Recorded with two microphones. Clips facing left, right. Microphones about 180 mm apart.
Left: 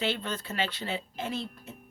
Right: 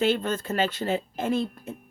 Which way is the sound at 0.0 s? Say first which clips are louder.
Right 8 dB; 45° right (ahead or behind).